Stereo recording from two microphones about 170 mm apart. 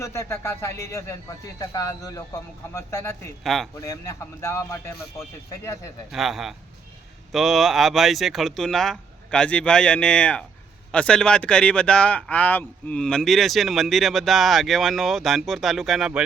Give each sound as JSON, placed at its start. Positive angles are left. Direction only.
{"t": 0.0, "sound": "speech", "side_deg": 15}
{"t": 3.4, "sound": "speech", "side_deg": 0}
{"t": 3.8, "sound": "speech", "side_deg": 20}
{"t": 6.1, "sound": "speech", "side_deg": 0}